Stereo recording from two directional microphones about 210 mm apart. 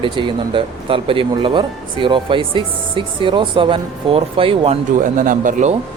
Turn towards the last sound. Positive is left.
turn(degrees=-35)  # may be behind; listen again after turning